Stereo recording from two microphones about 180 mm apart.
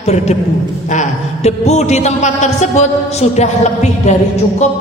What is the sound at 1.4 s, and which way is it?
A woman's voice, 40° left (ahead or behind).